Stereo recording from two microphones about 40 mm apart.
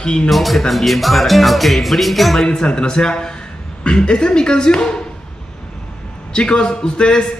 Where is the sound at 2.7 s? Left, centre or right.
Left.